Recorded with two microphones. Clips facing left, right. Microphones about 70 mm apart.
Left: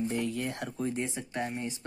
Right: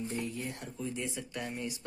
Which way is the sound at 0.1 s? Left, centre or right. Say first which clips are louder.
Left 5 dB; left.